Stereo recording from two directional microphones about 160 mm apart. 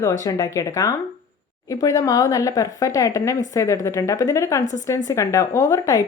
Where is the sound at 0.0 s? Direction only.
20° left (ahead or behind).